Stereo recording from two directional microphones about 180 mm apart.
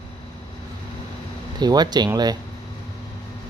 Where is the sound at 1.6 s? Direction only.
25° right (ahead or behind).